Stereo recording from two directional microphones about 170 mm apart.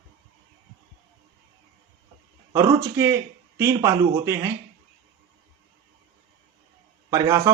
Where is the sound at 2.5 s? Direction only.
20° right (ahead or behind).